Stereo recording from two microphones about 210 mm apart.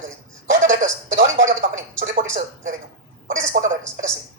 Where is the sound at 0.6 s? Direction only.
35° right (ahead or behind).